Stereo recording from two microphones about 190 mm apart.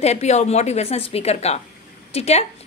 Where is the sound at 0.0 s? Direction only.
35° left (ahead or behind).